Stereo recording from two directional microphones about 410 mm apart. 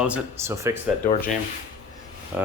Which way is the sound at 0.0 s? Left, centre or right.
Centre.